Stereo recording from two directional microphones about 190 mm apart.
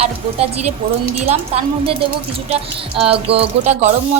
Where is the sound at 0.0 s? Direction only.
35° right (ahead or behind).